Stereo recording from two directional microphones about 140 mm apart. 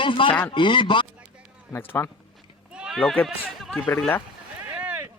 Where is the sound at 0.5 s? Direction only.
35° left (ahead or behind).